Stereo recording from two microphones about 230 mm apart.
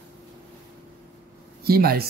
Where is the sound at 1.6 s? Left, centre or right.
Right.